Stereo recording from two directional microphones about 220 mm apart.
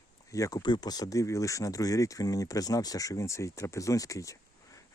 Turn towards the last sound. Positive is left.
turn(degrees=15)  # may be behind; listen again after turning